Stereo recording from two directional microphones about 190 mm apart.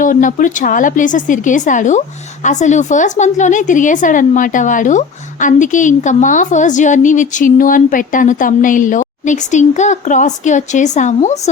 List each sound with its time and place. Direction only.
0.0 s a woman's voice: 45° left (ahead or behind)